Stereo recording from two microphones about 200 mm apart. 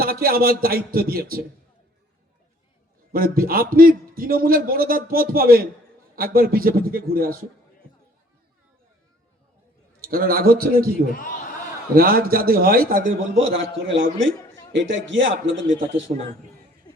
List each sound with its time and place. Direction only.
0.0 s a man's voice: 45° right (ahead or behind)
3.1 s a man's voice: 45° right (ahead or behind)
10.0 s a man's voice: 45° right (ahead or behind)
11.9 s a man's voice: 50° right (ahead or behind)
13.3 s a man's voice: 75° right (ahead or behind)
16.1 s a man's voice: 35° right (ahead or behind)
16.9 s a sound: 20° left (ahead or behind)